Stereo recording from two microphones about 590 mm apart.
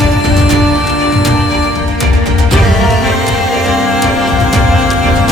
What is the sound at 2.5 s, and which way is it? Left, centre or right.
Music, centre.